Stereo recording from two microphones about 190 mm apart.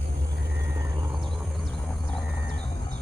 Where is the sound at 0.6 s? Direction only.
15° right (ahead or behind).